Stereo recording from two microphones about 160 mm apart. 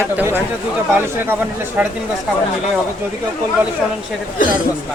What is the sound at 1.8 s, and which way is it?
Speech, 10° right (ahead or behind).